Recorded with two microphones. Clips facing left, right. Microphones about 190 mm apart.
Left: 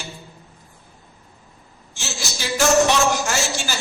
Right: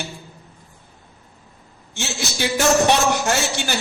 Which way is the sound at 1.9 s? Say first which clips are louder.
Right 5 dB; 60° right (ahead or behind).